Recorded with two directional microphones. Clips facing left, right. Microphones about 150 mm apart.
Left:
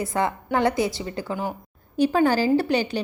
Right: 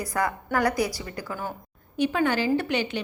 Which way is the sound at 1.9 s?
35° left (ahead or behind).